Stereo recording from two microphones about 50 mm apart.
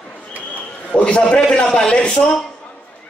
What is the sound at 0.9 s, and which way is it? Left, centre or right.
A man's voice, left.